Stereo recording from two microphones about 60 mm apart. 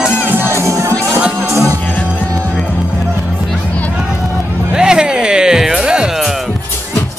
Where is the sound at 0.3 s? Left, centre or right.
Right.